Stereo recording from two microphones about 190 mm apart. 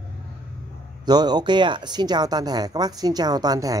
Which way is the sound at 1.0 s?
20° right (ahead or behind).